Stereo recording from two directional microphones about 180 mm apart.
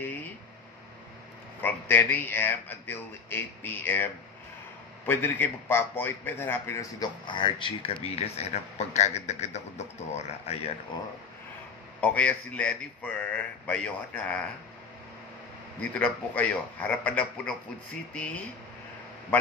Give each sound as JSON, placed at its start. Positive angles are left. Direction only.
{"t": 0.0, "sound": "a sound", "side_deg": 10}
{"t": 1.6, "sound": "a man's voice", "side_deg": 10}
{"t": 12.0, "sound": "speech", "side_deg": 5}
{"t": 15.8, "sound": "speech", "side_deg": 5}